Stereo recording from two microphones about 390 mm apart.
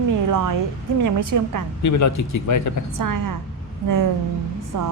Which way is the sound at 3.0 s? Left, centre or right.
Right.